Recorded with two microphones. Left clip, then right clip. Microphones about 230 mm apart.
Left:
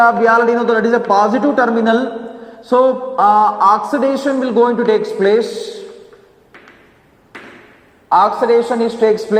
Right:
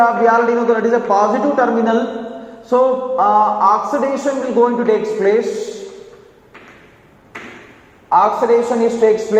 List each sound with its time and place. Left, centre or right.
0.0 s a man's voice: left
8.1 s a man's voice: left